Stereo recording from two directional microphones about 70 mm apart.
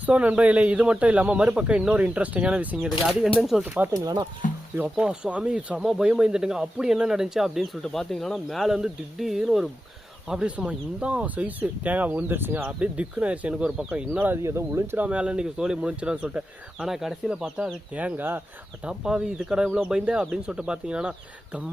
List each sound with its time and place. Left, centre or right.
0.0 s speech: centre
3.5 s speech: centre
4.9 s speech: centre
14.4 s speech: right
14.9 s speech: centre
18.9 s speech: centre